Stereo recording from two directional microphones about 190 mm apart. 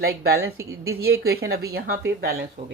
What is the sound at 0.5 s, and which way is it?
Speech, 15° right (ahead or behind).